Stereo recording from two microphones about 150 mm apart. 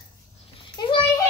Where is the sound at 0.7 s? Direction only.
35° left (ahead or behind).